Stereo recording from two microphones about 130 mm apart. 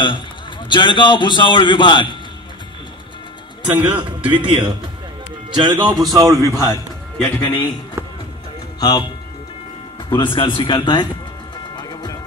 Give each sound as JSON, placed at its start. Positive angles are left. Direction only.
{"t": 0.7, "sound": "a man's voice", "side_deg": 40}
{"t": 3.7, "sound": "a man's voice", "side_deg": -10}
{"t": 4.3, "sound": "speech", "side_deg": -40}
{"t": 6.7, "sound": "speech", "side_deg": 15}
{"t": 8.7, "sound": "speech", "side_deg": 35}
{"t": 10.0, "sound": "a man's voice", "side_deg": 35}
{"t": 11.7, "sound": "music", "side_deg": 35}